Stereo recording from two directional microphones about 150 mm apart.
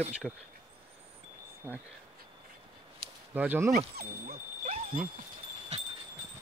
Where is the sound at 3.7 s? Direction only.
75° right (ahead or behind).